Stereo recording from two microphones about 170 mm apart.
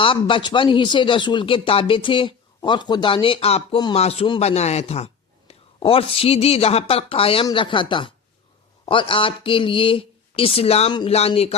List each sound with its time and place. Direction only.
0.0 s a man's voice: 30° left (ahead or behind)